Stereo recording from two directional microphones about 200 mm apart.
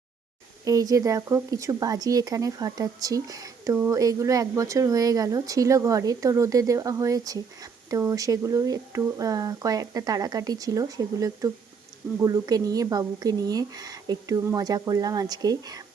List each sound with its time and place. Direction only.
0.6 s speech: 15° right (ahead or behind)